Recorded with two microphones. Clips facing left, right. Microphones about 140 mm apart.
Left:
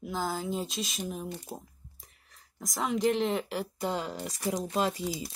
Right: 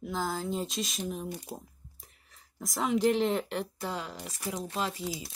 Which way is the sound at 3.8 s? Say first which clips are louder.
Left 4 dB; 30° left (ahead or behind).